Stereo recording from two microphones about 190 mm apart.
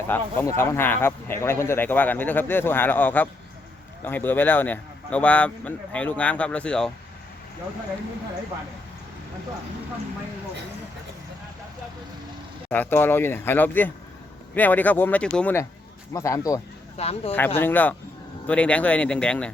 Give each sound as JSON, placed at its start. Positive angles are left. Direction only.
{"t": 0.1, "sound": "speech", "side_deg": 10}
{"t": 12.7, "sound": "speech", "side_deg": 10}
{"t": 17.0, "sound": "speech", "side_deg": 30}
{"t": 17.3, "sound": "speech", "side_deg": 10}